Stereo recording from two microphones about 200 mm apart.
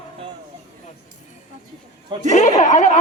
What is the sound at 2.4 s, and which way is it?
Speech, 40° left (ahead or behind).